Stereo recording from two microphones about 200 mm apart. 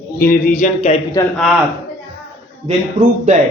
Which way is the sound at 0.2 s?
45° left (ahead or behind).